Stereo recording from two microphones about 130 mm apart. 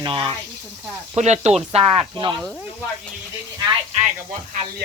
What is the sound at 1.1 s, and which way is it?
Speech, 60° right (ahead or behind).